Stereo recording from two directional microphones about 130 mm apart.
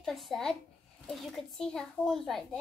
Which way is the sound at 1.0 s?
5° left (ahead or behind).